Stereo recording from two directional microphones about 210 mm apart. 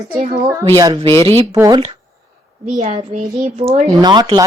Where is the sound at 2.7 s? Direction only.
35° right (ahead or behind).